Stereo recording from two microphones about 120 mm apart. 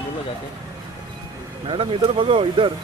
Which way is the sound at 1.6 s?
45° right (ahead or behind).